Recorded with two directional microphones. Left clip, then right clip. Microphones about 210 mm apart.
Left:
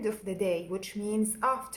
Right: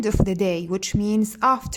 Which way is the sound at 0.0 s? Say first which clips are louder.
Right 8 dB; 50° right (ahead or behind).